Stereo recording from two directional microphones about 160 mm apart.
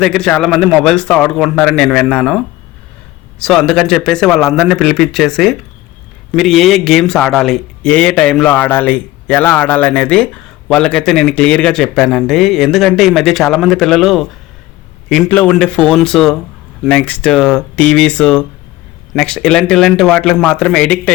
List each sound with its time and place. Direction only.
0.0 s a man's voice: 5° left (ahead or behind)